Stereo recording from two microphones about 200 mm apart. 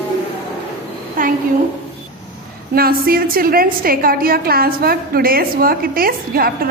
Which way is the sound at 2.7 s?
50° right (ahead or behind).